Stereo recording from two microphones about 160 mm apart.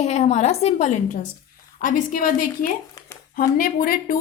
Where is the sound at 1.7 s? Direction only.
60° left (ahead or behind).